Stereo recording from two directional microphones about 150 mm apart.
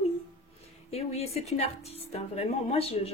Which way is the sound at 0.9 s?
45° left (ahead or behind).